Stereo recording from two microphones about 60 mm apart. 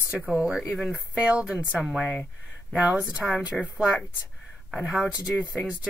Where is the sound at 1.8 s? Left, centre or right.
Centre.